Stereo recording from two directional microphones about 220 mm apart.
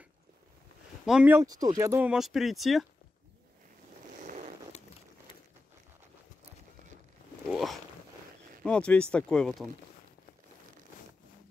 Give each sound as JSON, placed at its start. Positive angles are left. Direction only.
{"t": 1.0, "sound": "speech", "side_deg": -5}
{"t": 7.4, "sound": "a sound", "side_deg": 0}
{"t": 8.6, "sound": "speech", "side_deg": 5}